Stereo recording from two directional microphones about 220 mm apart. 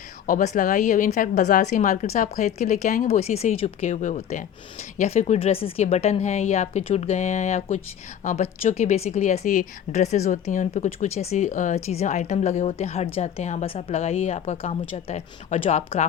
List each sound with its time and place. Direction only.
0.3 s a woman's voice: 35° left (ahead or behind)